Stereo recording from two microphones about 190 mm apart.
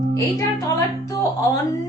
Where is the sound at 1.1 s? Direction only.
15° left (ahead or behind).